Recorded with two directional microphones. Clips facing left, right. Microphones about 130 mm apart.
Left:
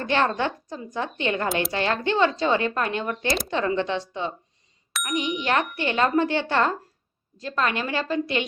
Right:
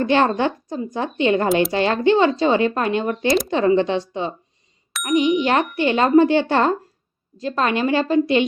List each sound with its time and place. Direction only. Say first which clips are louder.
0.0 s a woman's voice: right 6 dB; 20° right (ahead or behind)